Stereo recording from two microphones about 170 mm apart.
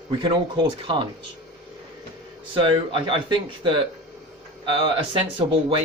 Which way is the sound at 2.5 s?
30° right (ahead or behind).